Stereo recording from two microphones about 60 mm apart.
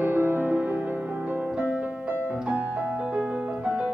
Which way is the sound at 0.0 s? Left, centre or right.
Right.